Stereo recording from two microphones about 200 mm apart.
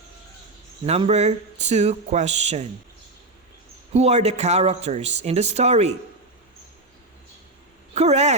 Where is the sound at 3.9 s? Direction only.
30° right (ahead or behind).